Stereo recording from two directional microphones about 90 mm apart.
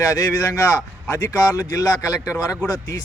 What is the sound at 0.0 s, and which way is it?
Speech, 35° left (ahead or behind).